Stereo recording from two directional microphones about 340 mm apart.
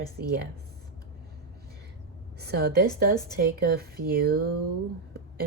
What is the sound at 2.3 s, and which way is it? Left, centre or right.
Speech, right.